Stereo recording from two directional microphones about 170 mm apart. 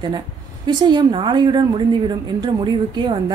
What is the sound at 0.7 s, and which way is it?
A woman's voice, 25° right (ahead or behind).